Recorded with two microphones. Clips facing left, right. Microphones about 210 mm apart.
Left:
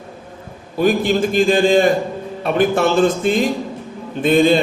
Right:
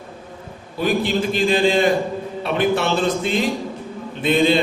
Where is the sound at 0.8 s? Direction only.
45° left (ahead or behind).